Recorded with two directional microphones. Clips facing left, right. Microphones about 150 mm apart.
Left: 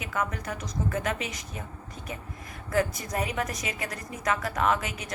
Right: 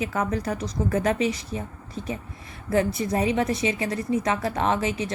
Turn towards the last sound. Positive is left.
turn(degrees=-30)  # may be behind; listen again after turning